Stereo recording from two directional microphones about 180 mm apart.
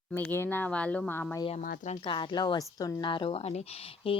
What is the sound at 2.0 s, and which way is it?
A woman's voice, 25° left (ahead or behind).